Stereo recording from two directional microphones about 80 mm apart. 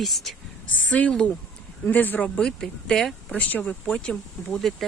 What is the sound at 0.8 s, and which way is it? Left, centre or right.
Speech, centre.